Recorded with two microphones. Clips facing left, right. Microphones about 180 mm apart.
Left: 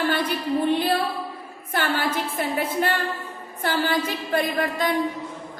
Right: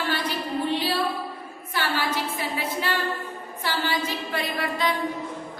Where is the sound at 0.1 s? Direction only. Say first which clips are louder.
Left 4 dB; 50° left (ahead or behind).